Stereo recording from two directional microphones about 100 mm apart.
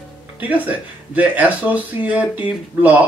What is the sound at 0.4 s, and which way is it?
Speech, 15° right (ahead or behind).